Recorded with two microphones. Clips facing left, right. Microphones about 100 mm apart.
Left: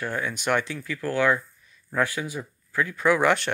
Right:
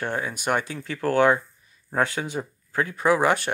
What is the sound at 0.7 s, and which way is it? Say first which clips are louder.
Speech: right 4 dB; 25° right (ahead or behind).